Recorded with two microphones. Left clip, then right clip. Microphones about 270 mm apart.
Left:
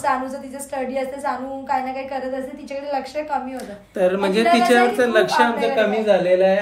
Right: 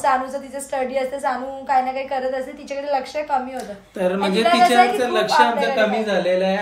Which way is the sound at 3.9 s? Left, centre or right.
Centre.